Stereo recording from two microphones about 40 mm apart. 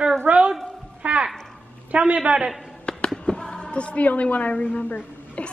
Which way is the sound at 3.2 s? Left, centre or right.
Left.